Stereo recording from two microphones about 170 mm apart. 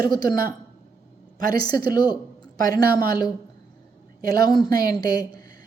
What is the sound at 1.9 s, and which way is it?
A woman's voice, 25° left (ahead or behind).